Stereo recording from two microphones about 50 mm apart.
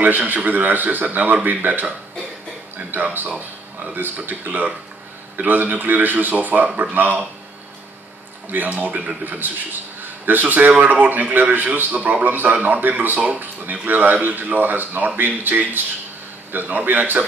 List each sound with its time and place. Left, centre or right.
0.0 s a man's voice: right
2.9 s a man's voice: right
8.5 s a man's voice: right